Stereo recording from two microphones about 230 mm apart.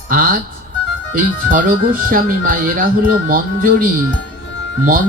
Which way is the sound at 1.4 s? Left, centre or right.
Right.